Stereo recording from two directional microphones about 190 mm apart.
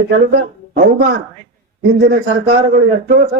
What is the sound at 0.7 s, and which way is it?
A man's voice, 60° right (ahead or behind).